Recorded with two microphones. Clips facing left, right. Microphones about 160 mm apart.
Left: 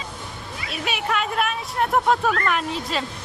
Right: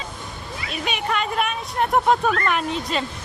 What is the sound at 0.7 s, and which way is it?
Speech, 5° left (ahead or behind).